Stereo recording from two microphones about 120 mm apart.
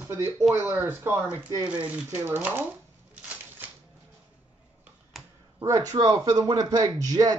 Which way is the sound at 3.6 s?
15° right (ahead or behind).